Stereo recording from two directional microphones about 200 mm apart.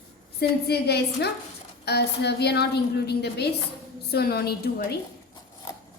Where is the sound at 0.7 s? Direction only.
55° left (ahead or behind).